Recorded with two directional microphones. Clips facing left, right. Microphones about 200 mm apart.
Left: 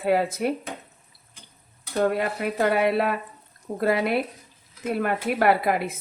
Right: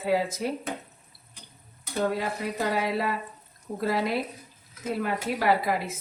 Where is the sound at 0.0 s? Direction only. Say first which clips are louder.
Left 4 dB; 60° left (ahead or behind).